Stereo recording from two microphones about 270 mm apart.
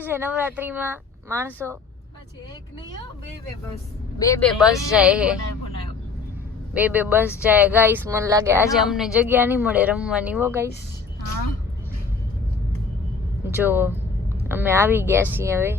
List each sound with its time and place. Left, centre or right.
0.0 s speech: centre
4.2 s speech: centre
6.7 s speech: centre
13.4 s speech: centre